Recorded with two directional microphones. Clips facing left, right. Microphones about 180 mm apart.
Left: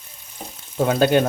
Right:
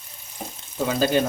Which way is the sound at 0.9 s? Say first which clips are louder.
Left 4 dB; 60° left (ahead or behind).